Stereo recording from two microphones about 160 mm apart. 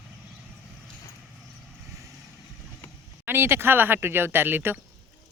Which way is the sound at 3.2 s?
15° right (ahead or behind).